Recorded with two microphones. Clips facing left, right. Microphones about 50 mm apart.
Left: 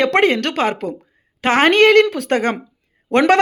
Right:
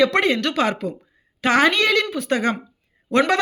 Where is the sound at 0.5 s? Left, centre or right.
Left.